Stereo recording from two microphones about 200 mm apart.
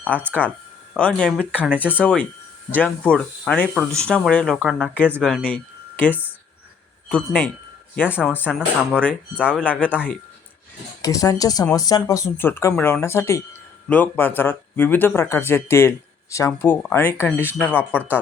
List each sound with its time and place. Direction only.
0.1 s speech: 10° left (ahead or behind); by 2.0 s 5° right (ahead or behind)
2.0 s speech: 5° left (ahead or behind)
8.1 s speech: 10° left (ahead or behind)
11.0 s speech: 15° left (ahead or behind)